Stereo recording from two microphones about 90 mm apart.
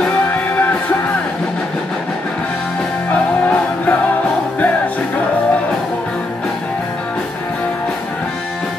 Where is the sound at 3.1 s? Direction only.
15° left (ahead or behind).